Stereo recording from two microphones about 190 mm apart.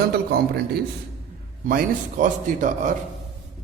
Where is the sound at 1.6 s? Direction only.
45° right (ahead or behind).